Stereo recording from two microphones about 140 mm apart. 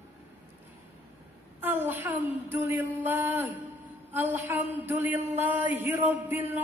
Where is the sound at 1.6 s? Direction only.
15° right (ahead or behind).